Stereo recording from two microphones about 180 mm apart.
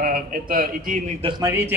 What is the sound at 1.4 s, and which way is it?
Speech, 15° right (ahead or behind).